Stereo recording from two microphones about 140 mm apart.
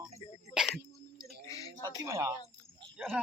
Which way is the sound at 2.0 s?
20° right (ahead or behind).